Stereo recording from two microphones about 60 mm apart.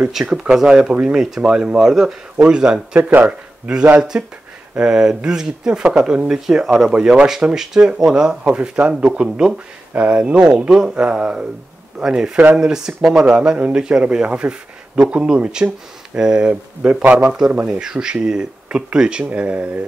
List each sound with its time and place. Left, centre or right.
0.1 s speech: centre; by 17.3 s right
17.6 s speech: centre